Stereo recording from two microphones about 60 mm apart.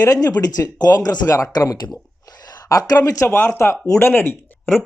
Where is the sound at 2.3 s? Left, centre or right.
Left.